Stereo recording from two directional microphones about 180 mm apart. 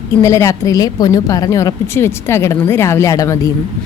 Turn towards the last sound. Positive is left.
turn(degrees=20)  # may be behind; listen again after turning